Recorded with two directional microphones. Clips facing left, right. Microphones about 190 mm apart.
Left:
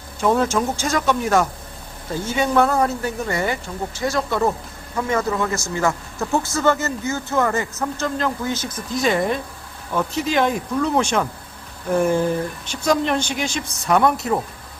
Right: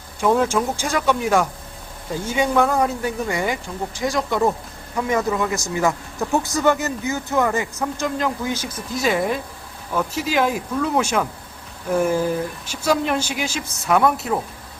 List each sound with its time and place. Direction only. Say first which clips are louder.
0.2 s speech: even; 10° right (ahead or behind)